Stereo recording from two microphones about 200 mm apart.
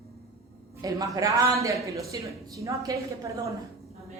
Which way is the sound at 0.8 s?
20° right (ahead or behind).